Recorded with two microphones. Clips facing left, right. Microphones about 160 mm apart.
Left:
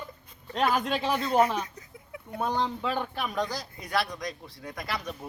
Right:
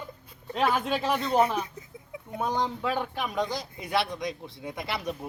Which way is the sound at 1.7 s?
20° right (ahead or behind).